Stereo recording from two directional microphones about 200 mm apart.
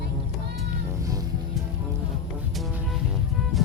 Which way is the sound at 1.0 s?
15° right (ahead or behind).